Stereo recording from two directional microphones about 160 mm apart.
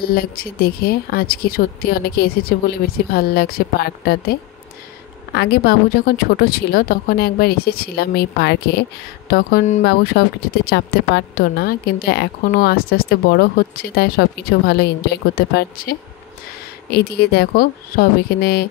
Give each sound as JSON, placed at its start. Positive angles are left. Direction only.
{"t": 0.0, "sound": "speech", "side_deg": 70}
{"t": 5.3, "sound": "speech", "side_deg": 90}
{"t": 9.8, "sound": "speech", "side_deg": 85}
{"t": 15.3, "sound": "speech", "side_deg": 70}
{"t": 16.9, "sound": "speech", "side_deg": 90}